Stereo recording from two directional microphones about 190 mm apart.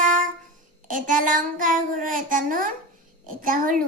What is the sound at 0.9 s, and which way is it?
Speech, 45° right (ahead or behind).